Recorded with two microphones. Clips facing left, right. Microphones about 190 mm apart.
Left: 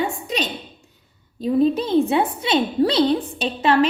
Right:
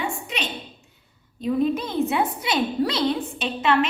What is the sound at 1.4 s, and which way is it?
A woman's voice, 35° left (ahead or behind).